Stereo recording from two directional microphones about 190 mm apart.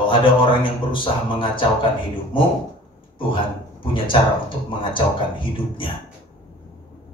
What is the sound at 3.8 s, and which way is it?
Speech, 25° left (ahead or behind).